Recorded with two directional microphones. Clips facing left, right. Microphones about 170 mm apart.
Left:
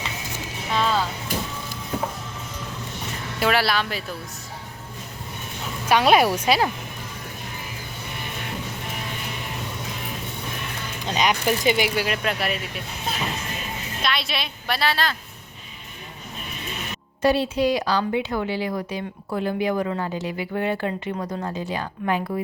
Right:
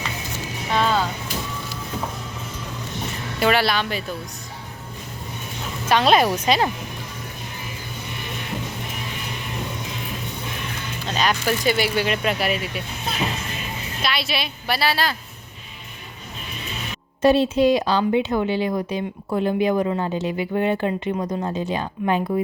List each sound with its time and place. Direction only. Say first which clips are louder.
0.7 s music: right 2 dB; centre (ahead or behind)
3.4 s speech: right 2 dB; centre (ahead or behind)
5.9 s speech: even; 10° left (ahead or behind)
11.0 s speech: even; 15° left (ahead or behind)
11.9 s speech: right 3 dB; centre (ahead or behind)
14.0 s a woman's voice: right 2 dB; 5° right (ahead or behind)
17.2 s speech: right 4 dB; 25° right (ahead or behind)